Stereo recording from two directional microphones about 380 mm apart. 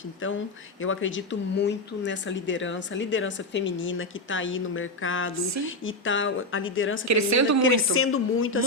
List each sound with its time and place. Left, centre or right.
0.2 s a woman's voice: left
7.1 s speech: right
7.6 s a woman's voice: left